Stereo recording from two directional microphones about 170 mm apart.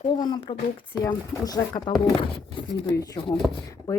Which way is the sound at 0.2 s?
25° left (ahead or behind).